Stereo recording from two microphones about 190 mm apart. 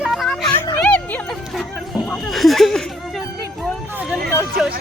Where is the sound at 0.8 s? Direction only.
5° left (ahead or behind).